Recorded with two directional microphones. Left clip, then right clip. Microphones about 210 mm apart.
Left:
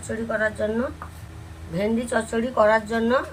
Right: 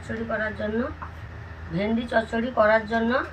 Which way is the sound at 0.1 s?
20° left (ahead or behind).